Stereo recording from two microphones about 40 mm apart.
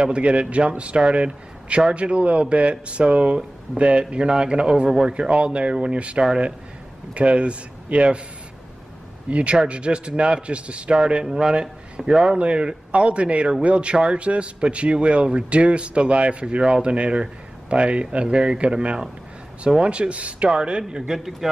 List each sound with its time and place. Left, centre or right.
0.0 s speech: right
9.3 s speech: right
11.2 s a man's voice: centre
12.4 s speech: right